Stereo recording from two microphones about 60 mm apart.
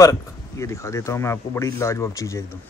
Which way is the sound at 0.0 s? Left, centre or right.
Left.